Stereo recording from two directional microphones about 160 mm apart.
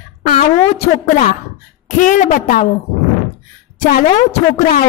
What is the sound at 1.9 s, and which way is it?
Speech, 55° left (ahead or behind).